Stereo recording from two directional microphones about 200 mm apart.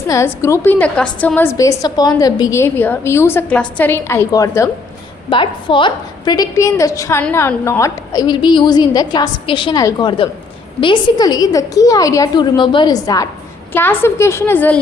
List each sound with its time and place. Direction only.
0.1 s a woman's voice: 15° left (ahead or behind)